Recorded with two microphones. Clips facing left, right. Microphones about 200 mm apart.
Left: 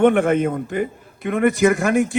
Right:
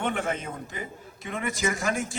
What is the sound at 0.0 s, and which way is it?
A man's voice, 60° left (ahead or behind).